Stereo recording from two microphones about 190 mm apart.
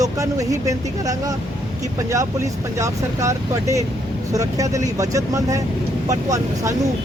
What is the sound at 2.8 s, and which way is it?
Speech, 15° right (ahead or behind).